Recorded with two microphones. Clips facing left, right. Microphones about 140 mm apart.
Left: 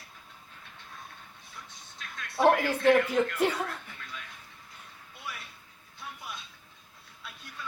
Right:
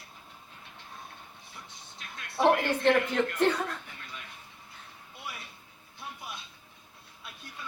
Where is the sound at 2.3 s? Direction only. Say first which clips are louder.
Left 1 dB; 5° left (ahead or behind).